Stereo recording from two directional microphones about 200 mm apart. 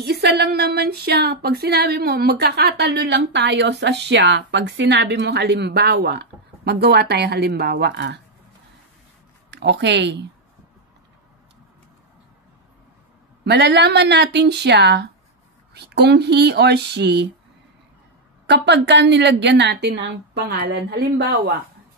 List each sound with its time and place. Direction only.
0.0 s speech: 55° right (ahead or behind)
9.5 s speech: 60° right (ahead or behind)
13.4 s speech: 55° right (ahead or behind)
18.5 s speech: 60° right (ahead or behind)